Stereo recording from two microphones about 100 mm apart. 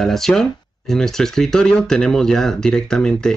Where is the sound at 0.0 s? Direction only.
5° left (ahead or behind).